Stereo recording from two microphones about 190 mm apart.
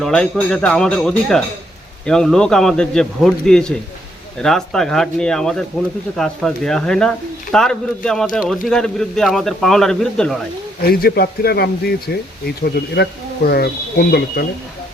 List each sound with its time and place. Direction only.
0.0 s speech: 5° left (ahead or behind)
10.8 s speech: 55° left (ahead or behind)